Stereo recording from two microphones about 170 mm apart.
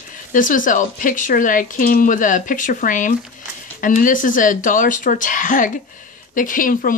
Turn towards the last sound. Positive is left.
turn(degrees=55)  # may be behind; listen again after turning